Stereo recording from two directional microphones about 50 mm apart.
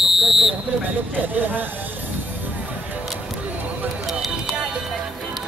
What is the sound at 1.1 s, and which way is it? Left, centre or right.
Speech, right.